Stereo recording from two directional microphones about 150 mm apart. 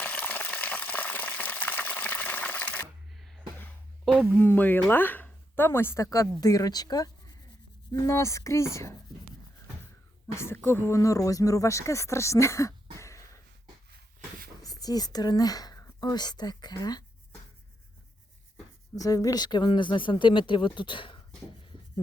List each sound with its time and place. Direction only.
0.0 s boiling: 10° left (ahead or behind)
3.6 s a sound: 5° left (ahead or behind)
4.4 s speech: 15° left (ahead or behind)
10.3 s speech: 15° left (ahead or behind)
13.9 s a sound: 90° right
14.6 s speech: 25° left (ahead or behind)
18.9 s speech: 25° left (ahead or behind)